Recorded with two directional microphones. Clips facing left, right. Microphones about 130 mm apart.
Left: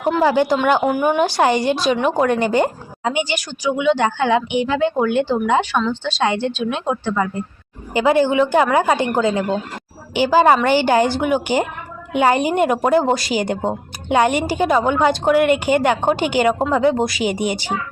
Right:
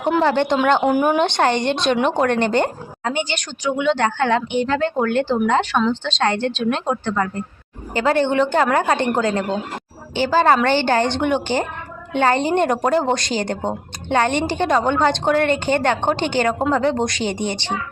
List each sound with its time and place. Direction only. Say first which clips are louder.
0.2 s speech: left 2 dB; 5° left (ahead or behind)
1.2 s a woman's voice: left 2 dB; 5° left (ahead or behind)